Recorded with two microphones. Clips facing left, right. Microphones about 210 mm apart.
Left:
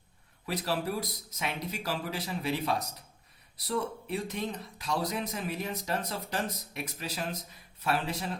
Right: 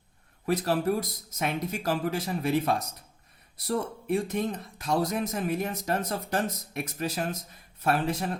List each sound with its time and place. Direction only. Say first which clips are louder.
0.4 s speech: right 6 dB; 50° right (ahead or behind)